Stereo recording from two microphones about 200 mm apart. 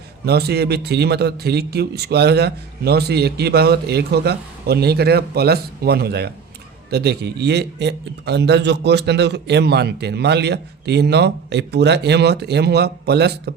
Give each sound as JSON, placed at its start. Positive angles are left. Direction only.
{"t": 0.3, "sound": "a man's voice", "side_deg": -55}